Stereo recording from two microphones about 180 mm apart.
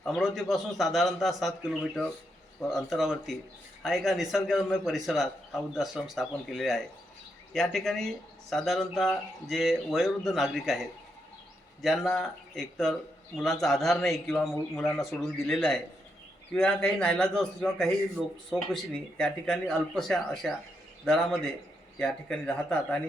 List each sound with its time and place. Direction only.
0.0 s speech: centre (ahead or behind)
11.8 s speech: centre (ahead or behind)
21.9 s speech: 5° left (ahead or behind)